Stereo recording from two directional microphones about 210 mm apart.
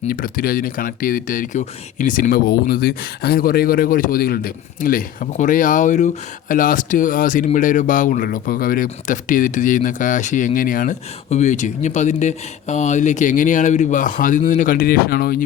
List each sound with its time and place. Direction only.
0.1 s speech: 45° left (ahead or behind)